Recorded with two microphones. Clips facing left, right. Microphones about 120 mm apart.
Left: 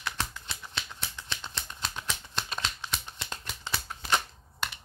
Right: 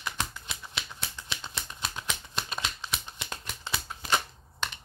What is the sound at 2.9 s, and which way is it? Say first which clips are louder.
Shuffling cards: even; 10° right (ahead or behind).